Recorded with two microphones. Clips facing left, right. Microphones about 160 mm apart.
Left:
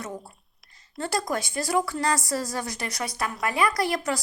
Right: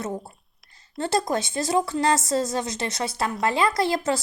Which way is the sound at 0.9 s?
25° right (ahead or behind).